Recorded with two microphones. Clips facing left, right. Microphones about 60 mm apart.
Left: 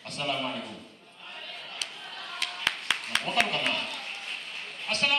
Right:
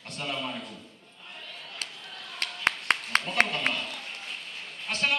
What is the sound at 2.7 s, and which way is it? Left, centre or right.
Clapping, right.